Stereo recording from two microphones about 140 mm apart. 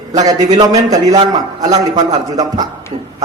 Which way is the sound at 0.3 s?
25° right (ahead or behind).